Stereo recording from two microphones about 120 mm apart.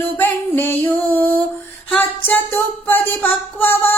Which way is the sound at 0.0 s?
15° left (ahead or behind).